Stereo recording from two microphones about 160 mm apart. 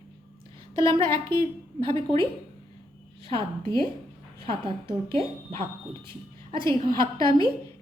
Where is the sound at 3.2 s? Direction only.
35° right (ahead or behind).